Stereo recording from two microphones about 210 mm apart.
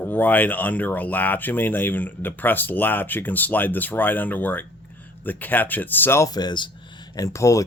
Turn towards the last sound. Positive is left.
turn(degrees=15)  # may be behind; listen again after turning